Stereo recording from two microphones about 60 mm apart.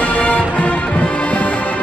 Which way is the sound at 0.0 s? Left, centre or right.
Left.